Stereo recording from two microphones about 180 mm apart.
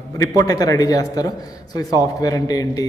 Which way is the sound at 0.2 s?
20° left (ahead or behind).